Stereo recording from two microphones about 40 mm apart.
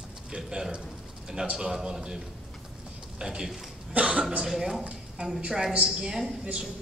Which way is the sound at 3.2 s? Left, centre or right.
Centre.